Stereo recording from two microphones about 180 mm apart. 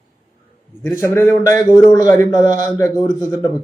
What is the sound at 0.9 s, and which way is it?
Speech, 15° left (ahead or behind).